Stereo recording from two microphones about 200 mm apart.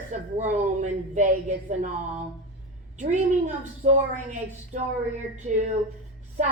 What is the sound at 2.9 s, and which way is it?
A woman's voice, 35° right (ahead or behind).